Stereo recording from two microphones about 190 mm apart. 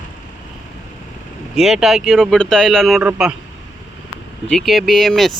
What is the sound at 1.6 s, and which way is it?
Speech, centre (ahead or behind).